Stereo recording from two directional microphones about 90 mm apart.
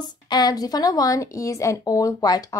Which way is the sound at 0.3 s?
45° left (ahead or behind).